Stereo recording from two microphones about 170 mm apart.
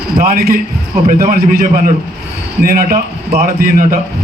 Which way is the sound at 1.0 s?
55° right (ahead or behind).